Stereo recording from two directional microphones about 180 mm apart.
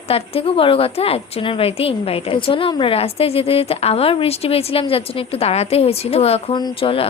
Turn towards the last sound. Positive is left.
turn(degrees=30)  # may be behind; listen again after turning